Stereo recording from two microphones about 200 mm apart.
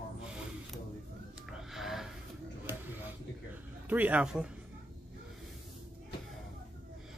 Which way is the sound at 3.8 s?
10° right (ahead or behind).